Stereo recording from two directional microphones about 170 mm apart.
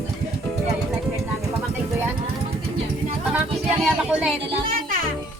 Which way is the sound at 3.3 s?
5° right (ahead or behind).